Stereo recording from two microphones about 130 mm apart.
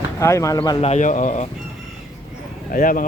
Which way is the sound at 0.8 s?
60° left (ahead or behind).